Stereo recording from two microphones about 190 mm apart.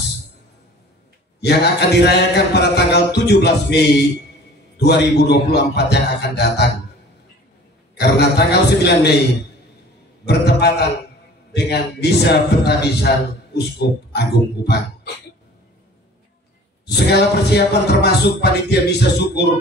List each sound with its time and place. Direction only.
1.4 s speech: 60° left (ahead or behind)
8.0 s speech: 60° left (ahead or behind)
10.2 s speech: 60° left (ahead or behind)
16.8 s speech: 60° left (ahead or behind)